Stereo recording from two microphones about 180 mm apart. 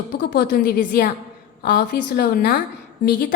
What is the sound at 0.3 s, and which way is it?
A woman's voice, 60° left (ahead or behind).